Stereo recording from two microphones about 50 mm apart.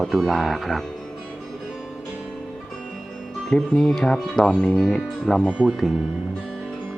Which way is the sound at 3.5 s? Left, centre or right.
Centre.